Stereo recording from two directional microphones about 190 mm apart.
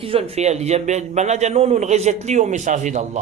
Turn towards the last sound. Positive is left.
turn(degrees=-40)  # may be behind; listen again after turning